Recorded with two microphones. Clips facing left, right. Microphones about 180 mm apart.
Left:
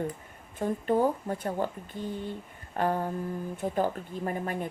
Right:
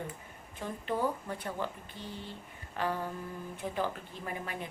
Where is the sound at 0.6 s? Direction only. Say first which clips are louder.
Left 7 dB; 45° left (ahead or behind).